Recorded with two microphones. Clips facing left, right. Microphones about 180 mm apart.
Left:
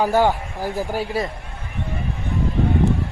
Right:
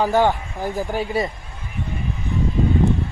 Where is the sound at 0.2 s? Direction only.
5° left (ahead or behind).